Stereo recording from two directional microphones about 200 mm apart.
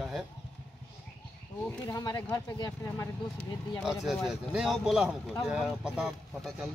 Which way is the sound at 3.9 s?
Centre (ahead or behind).